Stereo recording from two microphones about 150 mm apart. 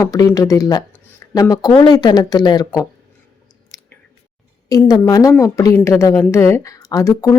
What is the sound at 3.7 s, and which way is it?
Chewing, 20° left (ahead or behind).